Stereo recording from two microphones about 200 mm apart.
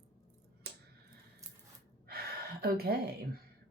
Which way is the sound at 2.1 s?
50° right (ahead or behind).